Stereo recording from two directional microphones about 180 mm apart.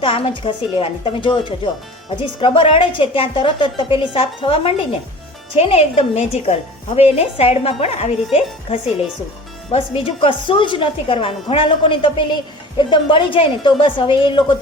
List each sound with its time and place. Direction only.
0.0 s a woman's voice: 30° left (ahead or behind)